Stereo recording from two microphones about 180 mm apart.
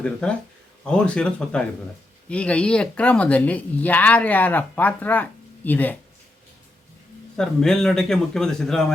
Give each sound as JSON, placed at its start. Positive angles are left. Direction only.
{"t": 0.0, "sound": "a man's voice", "side_deg": 5}
{"t": 7.3, "sound": "a man's voice", "side_deg": 5}